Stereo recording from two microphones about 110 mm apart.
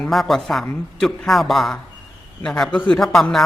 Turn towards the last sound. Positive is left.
turn(degrees=5)  # may be behind; listen again after turning